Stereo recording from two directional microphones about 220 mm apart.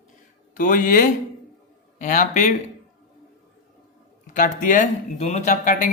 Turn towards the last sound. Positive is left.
turn(degrees=35)  # may be behind; listen again after turning